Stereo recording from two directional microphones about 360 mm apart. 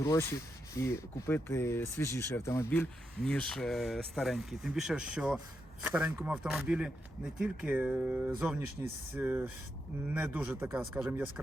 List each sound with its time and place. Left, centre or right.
0.0 s speech: centre